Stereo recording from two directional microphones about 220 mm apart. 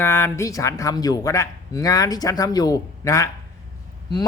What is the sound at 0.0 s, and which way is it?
Speech, 10° left (ahead or behind).